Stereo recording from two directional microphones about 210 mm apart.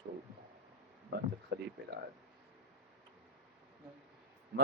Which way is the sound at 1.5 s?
50° right (ahead or behind).